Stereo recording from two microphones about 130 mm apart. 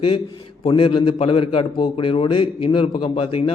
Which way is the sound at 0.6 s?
40° left (ahead or behind).